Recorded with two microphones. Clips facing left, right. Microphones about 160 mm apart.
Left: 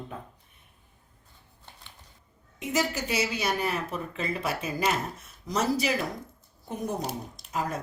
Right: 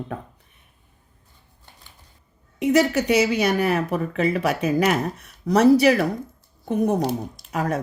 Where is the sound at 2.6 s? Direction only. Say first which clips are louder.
Right 11 dB; 75° right (ahead or behind).